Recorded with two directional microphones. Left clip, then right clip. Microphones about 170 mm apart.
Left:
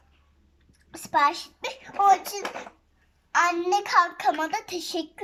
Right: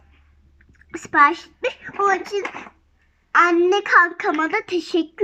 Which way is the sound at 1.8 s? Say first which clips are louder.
Left 1 dB; 15° left (ahead or behind).